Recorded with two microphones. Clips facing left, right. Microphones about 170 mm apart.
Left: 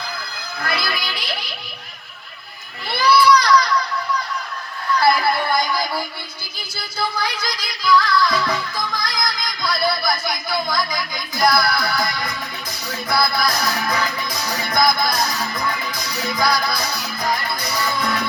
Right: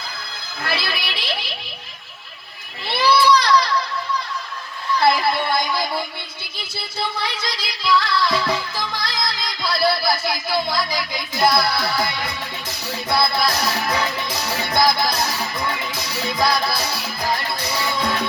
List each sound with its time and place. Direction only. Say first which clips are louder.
0.6 s music: left 1 dB; 25° right (ahead or behind)
2.9 s children playing: left 1 dB; 25° right (ahead or behind)
4.9 s a sound: even; 25° right (ahead or behind)
6.7 s music: left 2 dB; 25° right (ahead or behind)